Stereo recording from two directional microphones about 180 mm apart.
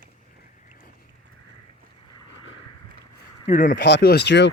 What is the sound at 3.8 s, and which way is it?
Speech, 65° left (ahead or behind).